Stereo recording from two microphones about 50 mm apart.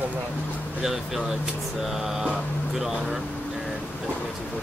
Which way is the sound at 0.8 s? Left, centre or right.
Centre.